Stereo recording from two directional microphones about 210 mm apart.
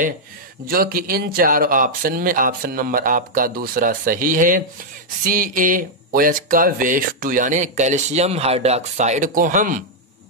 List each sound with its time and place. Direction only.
0.7 s speech: 45° right (ahead or behind)